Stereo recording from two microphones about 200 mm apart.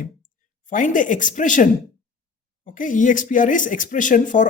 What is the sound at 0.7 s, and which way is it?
A woman's voice, 40° left (ahead or behind).